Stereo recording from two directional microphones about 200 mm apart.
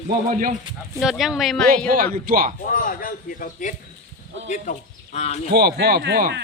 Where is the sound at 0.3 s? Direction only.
40° right (ahead or behind).